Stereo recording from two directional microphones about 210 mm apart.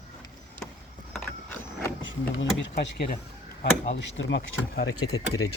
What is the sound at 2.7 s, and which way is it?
Speech, 45° left (ahead or behind).